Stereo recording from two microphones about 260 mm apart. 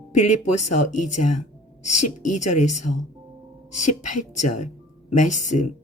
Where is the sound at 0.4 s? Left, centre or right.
Left.